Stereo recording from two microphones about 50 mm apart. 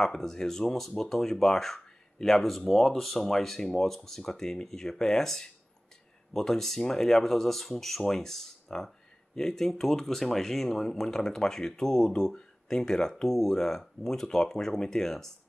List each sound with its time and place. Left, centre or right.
0.0 s speech: centre